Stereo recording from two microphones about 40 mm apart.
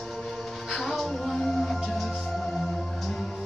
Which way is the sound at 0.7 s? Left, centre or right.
Centre.